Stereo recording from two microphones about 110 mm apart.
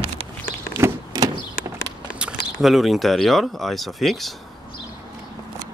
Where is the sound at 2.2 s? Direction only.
10° right (ahead or behind).